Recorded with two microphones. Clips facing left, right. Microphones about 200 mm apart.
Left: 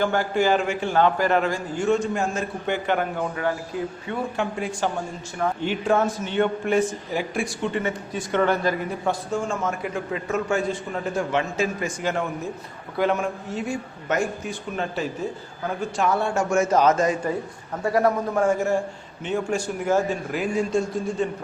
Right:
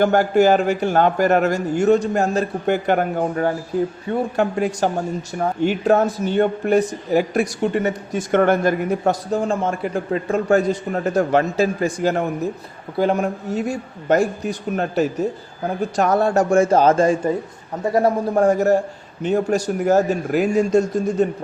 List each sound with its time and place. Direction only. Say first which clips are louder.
0.0 s a man's voice: right 7 dB; 40° right (ahead or behind)
9.0 s speech: right 4 dB; 35° right (ahead or behind)